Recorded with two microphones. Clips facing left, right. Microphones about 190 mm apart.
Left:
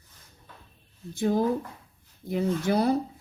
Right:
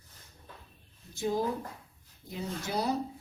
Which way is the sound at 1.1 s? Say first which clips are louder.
Left 6 dB; 55° left (ahead or behind).